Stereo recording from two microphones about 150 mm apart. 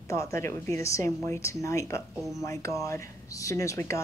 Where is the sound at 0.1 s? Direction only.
20° left (ahead or behind).